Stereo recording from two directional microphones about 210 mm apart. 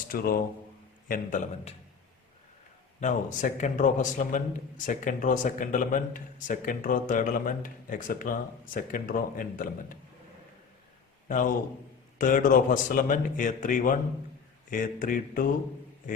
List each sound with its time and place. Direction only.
0.1 s a man's voice: 45° left (ahead or behind)
3.0 s a man's voice: 35° left (ahead or behind)
11.3 s a man's voice: 40° left (ahead or behind)